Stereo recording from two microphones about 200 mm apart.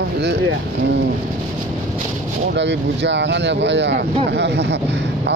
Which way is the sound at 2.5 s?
60° right (ahead or behind).